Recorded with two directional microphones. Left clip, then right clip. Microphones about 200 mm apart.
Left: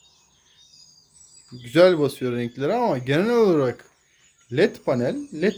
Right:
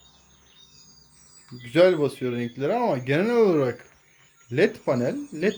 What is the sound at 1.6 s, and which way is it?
Speech, 15° left (ahead or behind).